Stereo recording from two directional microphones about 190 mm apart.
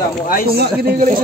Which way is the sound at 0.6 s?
55° right (ahead or behind).